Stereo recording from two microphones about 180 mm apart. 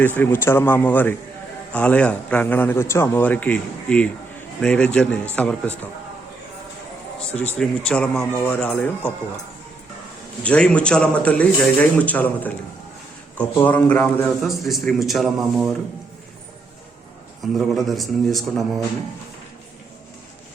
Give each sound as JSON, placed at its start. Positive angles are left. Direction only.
{"t": 0.0, "sound": "a man's voice", "side_deg": 10}
{"t": 7.3, "sound": "a man's voice", "side_deg": 10}
{"t": 10.4, "sound": "a man's voice", "side_deg": 5}
{"t": 14.4, "sound": "a man's voice", "side_deg": 0}
{"t": 17.4, "sound": "a man's voice", "side_deg": 0}